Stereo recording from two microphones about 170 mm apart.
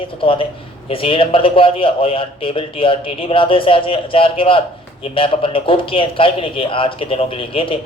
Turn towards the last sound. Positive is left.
turn(degrees=35)  # may be behind; listen again after turning